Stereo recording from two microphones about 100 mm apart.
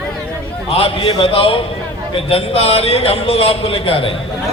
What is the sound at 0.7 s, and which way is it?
A man's voice, 75° left (ahead or behind).